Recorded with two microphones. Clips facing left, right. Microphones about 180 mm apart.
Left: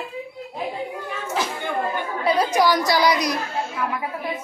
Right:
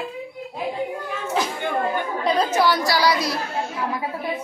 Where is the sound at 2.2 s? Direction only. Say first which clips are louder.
Left 1 dB; 10° left (ahead or behind).